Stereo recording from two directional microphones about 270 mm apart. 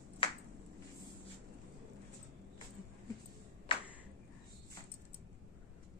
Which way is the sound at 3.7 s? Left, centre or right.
Centre.